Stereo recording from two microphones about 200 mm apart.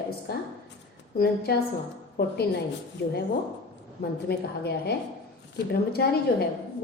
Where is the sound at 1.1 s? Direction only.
50° left (ahead or behind).